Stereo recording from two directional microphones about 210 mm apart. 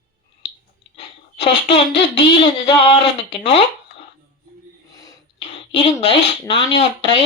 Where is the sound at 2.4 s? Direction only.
25° left (ahead or behind).